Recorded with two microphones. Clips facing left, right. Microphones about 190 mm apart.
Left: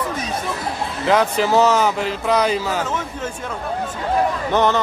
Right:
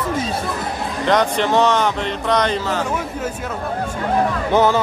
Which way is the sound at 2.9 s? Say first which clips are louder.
Right 2 dB; 10° right (ahead or behind).